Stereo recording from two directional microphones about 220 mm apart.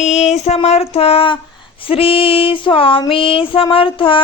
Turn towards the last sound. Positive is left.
turn(degrees=25)  # may be behind; listen again after turning